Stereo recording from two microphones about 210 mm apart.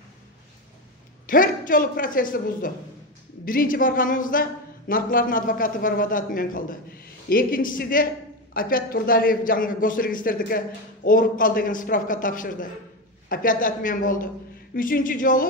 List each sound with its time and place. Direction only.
1.2 s a man's voice: 40° left (ahead or behind)